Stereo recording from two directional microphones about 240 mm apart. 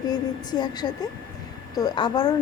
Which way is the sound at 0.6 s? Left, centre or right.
Centre.